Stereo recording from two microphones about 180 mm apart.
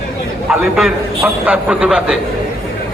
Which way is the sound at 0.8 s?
5° right (ahead or behind).